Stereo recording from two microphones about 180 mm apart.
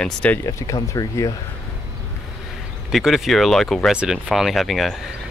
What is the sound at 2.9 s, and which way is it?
Speech, centre (ahead or behind).